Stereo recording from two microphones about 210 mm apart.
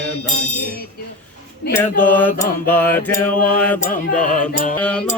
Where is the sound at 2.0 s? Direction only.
10° left (ahead or behind).